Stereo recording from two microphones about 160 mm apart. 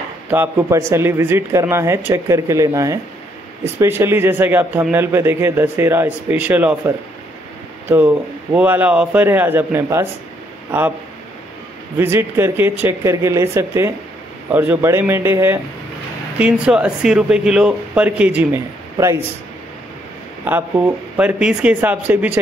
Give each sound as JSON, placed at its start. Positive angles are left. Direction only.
{"t": 0.3, "sound": "speech", "side_deg": -15}
{"t": 8.5, "sound": "speech", "side_deg": -10}
{"t": 12.0, "sound": "speech", "side_deg": -15}
{"t": 20.4, "sound": "speech", "side_deg": -10}